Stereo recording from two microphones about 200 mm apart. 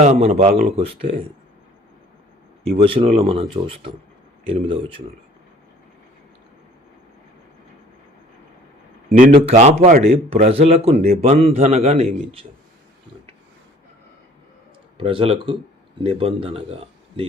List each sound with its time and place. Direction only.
0.0 s a man's voice: 35° right (ahead or behind)
2.7 s speech: 30° right (ahead or behind)
9.0 s speech: 45° right (ahead or behind)
9.3 s a man's voice: 30° right (ahead or behind)
14.9 s speech: 25° right (ahead or behind)